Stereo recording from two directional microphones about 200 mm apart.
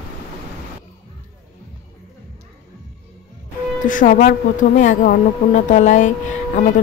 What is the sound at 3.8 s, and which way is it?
Speech, 40° left (ahead or behind).